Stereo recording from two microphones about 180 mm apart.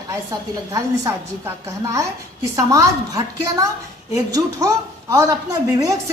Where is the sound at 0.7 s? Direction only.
15° right (ahead or behind).